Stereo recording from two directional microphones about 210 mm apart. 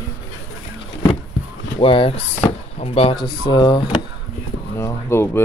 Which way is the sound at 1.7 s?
25° left (ahead or behind).